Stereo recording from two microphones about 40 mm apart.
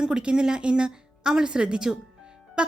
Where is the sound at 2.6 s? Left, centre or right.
Centre.